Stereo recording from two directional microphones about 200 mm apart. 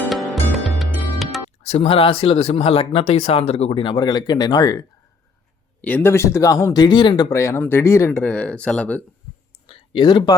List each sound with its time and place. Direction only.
0.0 s music: centre (ahead or behind)
1.6 s speech: 30° left (ahead or behind)
5.8 s speech: 10° left (ahead or behind)
9.6 s speech: 25° left (ahead or behind)